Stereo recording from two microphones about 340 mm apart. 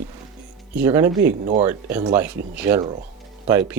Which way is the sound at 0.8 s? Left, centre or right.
Centre.